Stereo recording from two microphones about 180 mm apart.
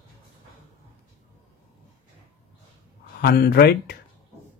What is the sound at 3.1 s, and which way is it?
Speech, 60° left (ahead or behind).